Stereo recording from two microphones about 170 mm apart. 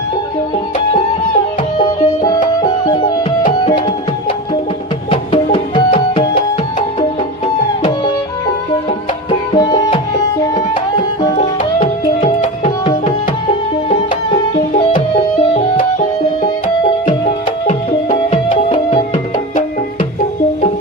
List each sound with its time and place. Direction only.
2.2 s music: 25° left (ahead or behind)
5.1 s music: 35° left (ahead or behind)
9.5 s music: 25° left (ahead or behind)
11.3 s tabla: 40° left (ahead or behind)
14.5 s music: 35° left (ahead or behind)
17.7 s music: 40° left (ahead or behind)
18.7 s music: 35° left (ahead or behind)